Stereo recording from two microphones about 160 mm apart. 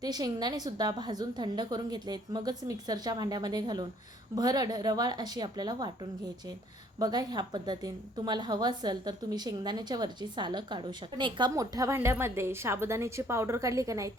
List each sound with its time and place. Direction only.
0.0 s a woman's voice: 25° right (ahead or behind)